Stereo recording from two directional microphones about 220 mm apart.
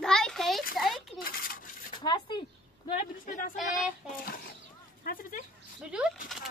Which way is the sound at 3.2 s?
40° left (ahead or behind).